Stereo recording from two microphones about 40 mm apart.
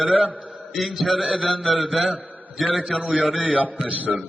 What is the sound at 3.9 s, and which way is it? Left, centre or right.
Speech, right.